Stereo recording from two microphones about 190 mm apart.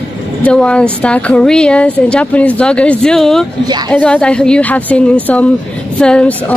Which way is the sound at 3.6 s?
20° right (ahead or behind).